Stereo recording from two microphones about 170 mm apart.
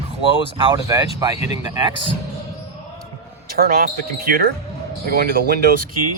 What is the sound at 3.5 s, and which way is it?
Speech, 60° right (ahead or behind).